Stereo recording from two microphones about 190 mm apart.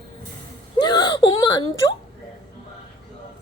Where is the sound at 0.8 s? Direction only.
20° left (ahead or behind).